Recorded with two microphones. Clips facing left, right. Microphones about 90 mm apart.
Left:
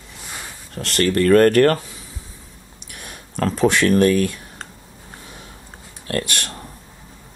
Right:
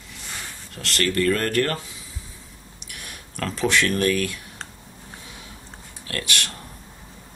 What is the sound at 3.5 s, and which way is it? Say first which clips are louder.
Speech: left 6 dB; 40° left (ahead or behind).